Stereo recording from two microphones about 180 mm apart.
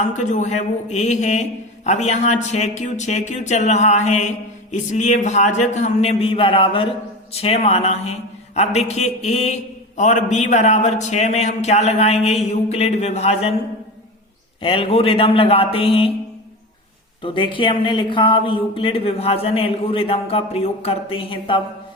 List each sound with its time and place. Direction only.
0.0 s a man's voice: 40° left (ahead or behind)
14.6 s a man's voice: 30° left (ahead or behind)
17.2 s speech: 30° left (ahead or behind)